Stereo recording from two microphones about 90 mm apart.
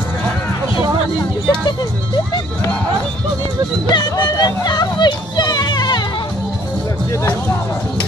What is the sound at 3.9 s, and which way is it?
Music, 45° left (ahead or behind).